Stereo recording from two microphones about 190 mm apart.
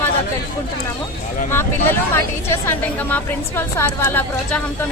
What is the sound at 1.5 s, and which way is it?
A woman's voice, 10° left (ahead or behind).